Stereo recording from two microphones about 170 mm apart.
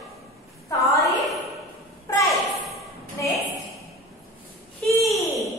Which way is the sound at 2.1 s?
15° left (ahead or behind).